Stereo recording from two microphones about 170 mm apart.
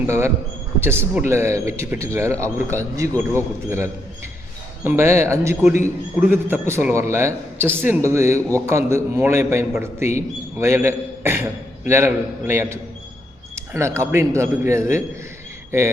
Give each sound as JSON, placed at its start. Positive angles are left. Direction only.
{"t": 0.0, "sound": "a man's voice", "side_deg": -15}